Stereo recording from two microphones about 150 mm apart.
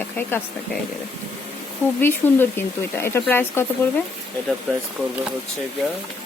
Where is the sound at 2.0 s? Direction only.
15° left (ahead or behind).